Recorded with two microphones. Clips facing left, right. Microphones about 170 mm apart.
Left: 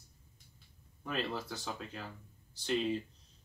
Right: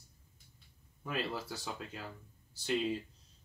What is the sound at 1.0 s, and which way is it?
Speech, 5° right (ahead or behind).